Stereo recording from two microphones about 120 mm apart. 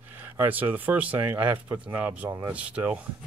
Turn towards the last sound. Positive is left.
turn(degrees=-10)  # may be behind; listen again after turning